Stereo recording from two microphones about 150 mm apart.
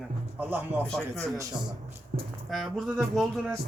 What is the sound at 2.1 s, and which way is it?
Speech, 60° right (ahead or behind).